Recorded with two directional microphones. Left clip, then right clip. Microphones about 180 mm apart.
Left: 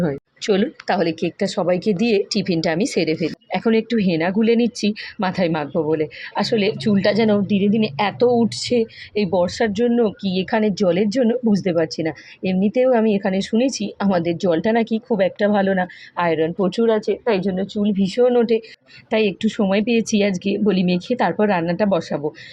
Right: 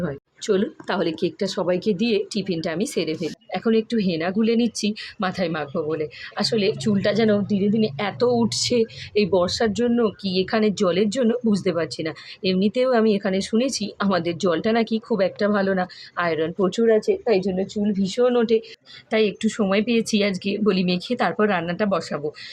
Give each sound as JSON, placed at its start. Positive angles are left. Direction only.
{"t": 0.6, "sound": "speech", "side_deg": 5}
{"t": 7.4, "sound": "a woman's voice", "side_deg": -25}
{"t": 7.9, "sound": "speech", "side_deg": 5}
{"t": 9.4, "sound": "speech", "side_deg": 10}